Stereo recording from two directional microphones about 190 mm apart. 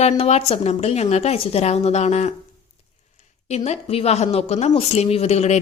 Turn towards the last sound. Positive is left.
turn(degrees=35)  # may be behind; listen again after turning